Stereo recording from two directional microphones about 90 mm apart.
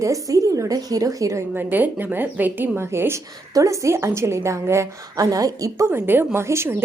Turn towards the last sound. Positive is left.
turn(degrees=-30)  # may be behind; listen again after turning